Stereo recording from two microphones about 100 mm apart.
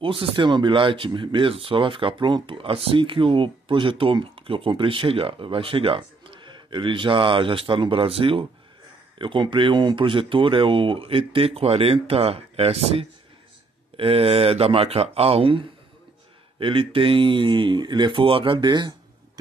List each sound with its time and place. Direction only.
0.0 s speech: 60° right (ahead or behind)
9.2 s speech: 55° right (ahead or behind)